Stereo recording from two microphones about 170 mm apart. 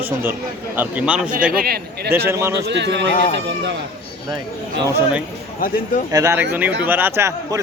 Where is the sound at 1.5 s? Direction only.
65° right (ahead or behind).